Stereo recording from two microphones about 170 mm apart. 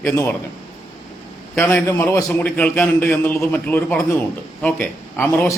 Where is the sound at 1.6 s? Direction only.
10° left (ahead or behind).